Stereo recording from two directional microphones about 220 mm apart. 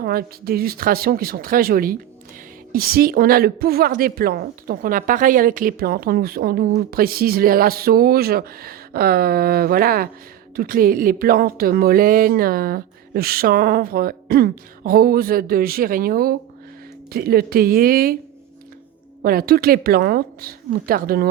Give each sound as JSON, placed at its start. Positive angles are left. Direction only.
{"t": 0.0, "sound": "a woman's voice", "side_deg": -40}
{"t": 19.2, "sound": "a woman's voice", "side_deg": -40}